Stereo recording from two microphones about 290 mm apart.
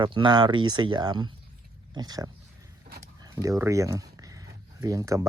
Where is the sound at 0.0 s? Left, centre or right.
Centre.